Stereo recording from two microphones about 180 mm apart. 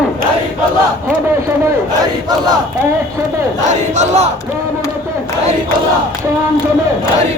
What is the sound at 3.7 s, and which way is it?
Crowd, 40° right (ahead or behind).